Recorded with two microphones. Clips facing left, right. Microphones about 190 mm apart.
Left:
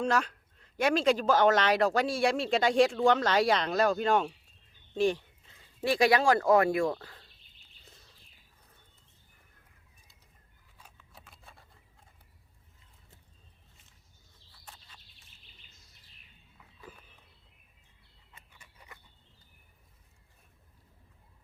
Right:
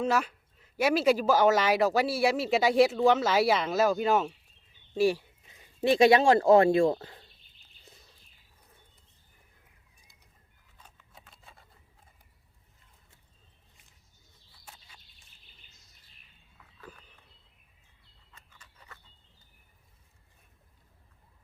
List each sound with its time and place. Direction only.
0.0 s speech: 5° right (ahead or behind); by 7.3 s 20° right (ahead or behind)
10.9 s scissors: centre (ahead or behind)
14.6 s bird: 10° right (ahead or behind)
18.3 s a sound: 10° left (ahead or behind)